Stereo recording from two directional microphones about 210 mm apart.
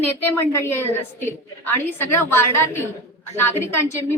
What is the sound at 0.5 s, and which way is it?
A woman's voice, 10° left (ahead or behind).